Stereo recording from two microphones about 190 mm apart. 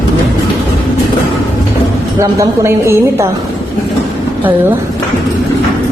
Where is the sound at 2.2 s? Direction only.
15° right (ahead or behind).